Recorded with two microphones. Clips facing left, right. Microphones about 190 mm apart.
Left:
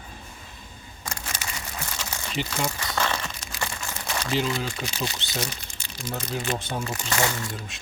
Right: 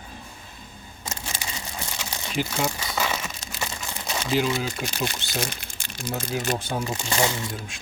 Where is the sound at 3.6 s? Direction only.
15° right (ahead or behind).